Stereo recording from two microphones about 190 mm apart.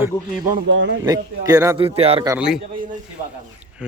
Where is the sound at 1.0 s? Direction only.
20° right (ahead or behind).